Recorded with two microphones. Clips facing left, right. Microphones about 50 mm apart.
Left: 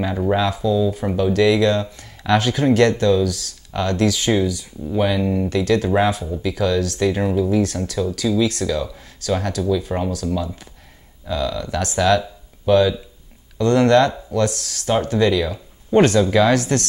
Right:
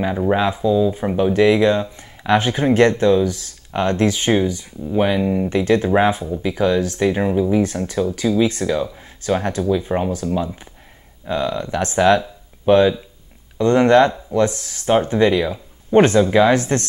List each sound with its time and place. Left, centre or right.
0.0 s speech: centre